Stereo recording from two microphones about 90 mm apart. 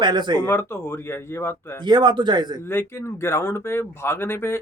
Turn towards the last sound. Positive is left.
turn(degrees=25)  # may be behind; listen again after turning